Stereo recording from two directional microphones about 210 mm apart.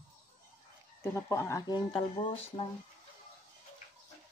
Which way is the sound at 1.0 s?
15° left (ahead or behind).